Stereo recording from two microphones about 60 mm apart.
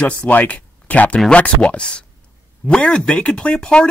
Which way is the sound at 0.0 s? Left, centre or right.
Left.